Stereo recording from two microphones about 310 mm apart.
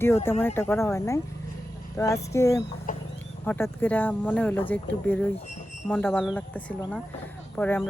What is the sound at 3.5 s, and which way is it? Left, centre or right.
Speech, centre.